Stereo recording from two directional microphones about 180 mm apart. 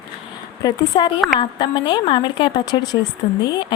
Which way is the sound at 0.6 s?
25° left (ahead or behind).